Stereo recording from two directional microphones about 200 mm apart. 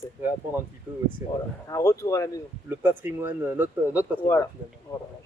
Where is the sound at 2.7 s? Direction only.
10° right (ahead or behind).